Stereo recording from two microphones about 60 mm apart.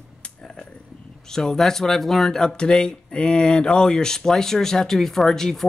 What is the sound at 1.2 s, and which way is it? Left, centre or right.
Speech, centre.